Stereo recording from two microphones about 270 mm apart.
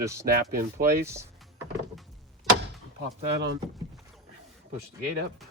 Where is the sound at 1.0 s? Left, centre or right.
Centre.